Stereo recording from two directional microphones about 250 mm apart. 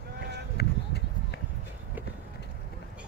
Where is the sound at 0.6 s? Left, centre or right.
Left.